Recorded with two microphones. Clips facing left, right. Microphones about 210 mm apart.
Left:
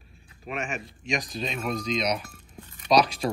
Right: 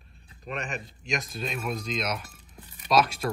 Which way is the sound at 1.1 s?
Centre (ahead or behind).